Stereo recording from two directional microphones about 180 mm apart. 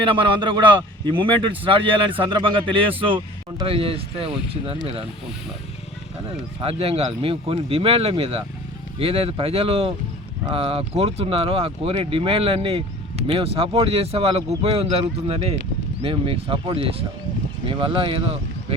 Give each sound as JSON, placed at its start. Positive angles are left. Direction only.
{"t": 0.0, "sound": "speech", "side_deg": -30}
{"t": 6.6, "sound": "speech", "side_deg": -30}